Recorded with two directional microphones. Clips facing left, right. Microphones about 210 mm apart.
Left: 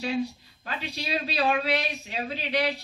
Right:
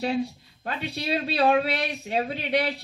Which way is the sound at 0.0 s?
55° right (ahead or behind).